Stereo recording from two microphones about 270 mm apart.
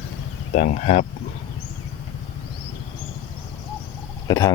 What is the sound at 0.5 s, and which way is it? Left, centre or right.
Speech, left.